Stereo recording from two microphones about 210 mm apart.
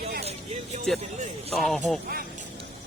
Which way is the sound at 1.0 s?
30° right (ahead or behind).